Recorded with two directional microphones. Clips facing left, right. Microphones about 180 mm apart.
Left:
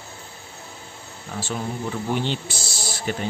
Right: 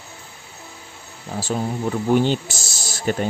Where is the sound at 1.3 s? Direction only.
30° right (ahead or behind).